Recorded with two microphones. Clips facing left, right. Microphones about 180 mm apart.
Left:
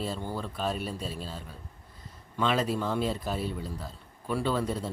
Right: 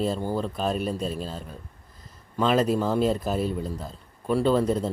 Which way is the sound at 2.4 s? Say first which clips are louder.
Right 6 dB; 45° right (ahead or behind).